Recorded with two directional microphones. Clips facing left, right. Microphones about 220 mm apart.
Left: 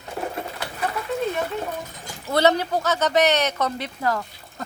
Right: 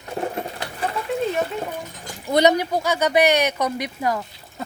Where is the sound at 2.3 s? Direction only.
15° right (ahead or behind).